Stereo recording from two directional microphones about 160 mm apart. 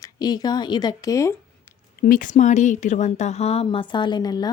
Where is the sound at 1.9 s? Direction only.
60° left (ahead or behind).